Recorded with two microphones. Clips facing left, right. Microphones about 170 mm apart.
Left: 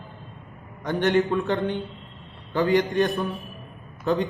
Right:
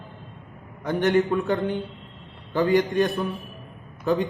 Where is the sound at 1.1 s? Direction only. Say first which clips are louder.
Right 1 dB; centre (ahead or behind).